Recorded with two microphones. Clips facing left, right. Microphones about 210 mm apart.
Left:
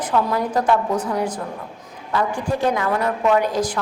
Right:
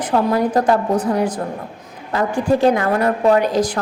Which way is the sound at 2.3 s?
30° right (ahead or behind).